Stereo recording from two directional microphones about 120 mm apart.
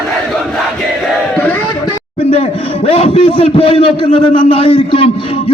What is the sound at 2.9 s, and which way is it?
A man's voice, 50° left (ahead or behind).